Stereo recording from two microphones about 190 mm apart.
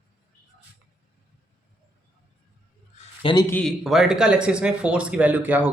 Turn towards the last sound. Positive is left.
turn(degrees=-10)  # may be behind; listen again after turning